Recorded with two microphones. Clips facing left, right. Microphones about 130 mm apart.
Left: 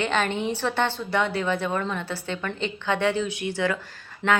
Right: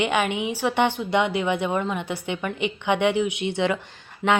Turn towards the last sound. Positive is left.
turn(degrees=-20)  # may be behind; listen again after turning